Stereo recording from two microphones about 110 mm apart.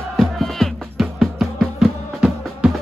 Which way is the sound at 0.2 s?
Centre (ahead or behind).